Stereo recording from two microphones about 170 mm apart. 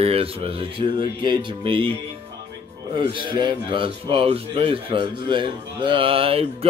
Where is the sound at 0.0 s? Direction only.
35° right (ahead or behind).